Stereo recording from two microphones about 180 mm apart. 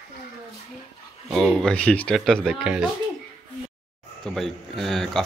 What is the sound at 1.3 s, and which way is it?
Speech, centre (ahead or behind).